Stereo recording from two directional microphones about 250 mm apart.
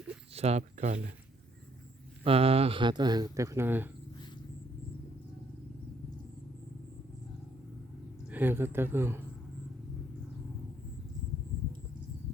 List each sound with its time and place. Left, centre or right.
0.3 s speech: right
2.2 s speech: right; by 3.9 s centre
8.3 s speech: centre